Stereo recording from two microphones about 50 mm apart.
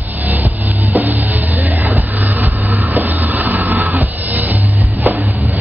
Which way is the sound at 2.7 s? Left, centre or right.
Right.